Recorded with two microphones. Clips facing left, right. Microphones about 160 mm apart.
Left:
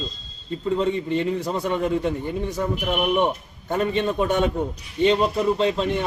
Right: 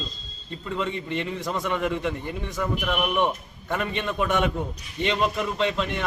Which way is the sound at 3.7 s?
35° left (ahead or behind).